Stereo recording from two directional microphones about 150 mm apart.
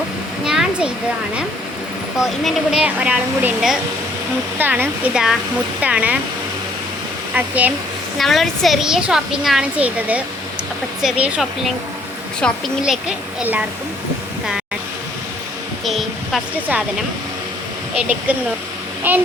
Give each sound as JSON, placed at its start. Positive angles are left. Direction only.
{"t": 0.4, "sound": "a sound", "side_deg": -5}
{"t": 2.1, "sound": "a woman's voice", "side_deg": 0}
{"t": 7.3, "sound": "a child's voice", "side_deg": -10}
{"t": 8.2, "sound": "a woman's voice", "side_deg": 0}
{"t": 12.8, "sound": "a child's voice", "side_deg": -5}
{"t": 15.8, "sound": "a sound", "side_deg": 0}
{"t": 16.6, "sound": "a child's voice", "side_deg": -10}
{"t": 17.9, "sound": "a child's voice", "side_deg": -10}